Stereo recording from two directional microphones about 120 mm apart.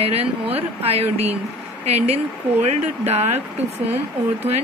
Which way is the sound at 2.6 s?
65° right (ahead or behind).